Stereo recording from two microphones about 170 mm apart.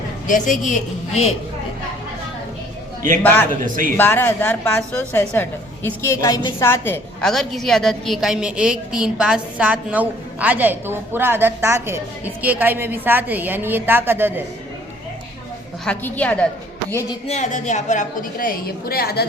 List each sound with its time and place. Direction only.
0.3 s a woman's voice: 50° left (ahead or behind)
3.9 s a woman's voice: 15° left (ahead or behind); by 14.4 s 10° right (ahead or behind)
15.8 s a woman's voice: 10° left (ahead or behind)
17.2 s a woman's voice: 45° left (ahead or behind); by 19.3 s 70° left (ahead or behind)